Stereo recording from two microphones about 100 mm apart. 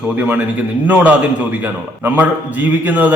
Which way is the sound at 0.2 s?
15° right (ahead or behind).